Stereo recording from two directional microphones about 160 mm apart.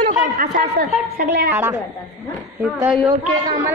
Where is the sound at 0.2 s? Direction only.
60° right (ahead or behind).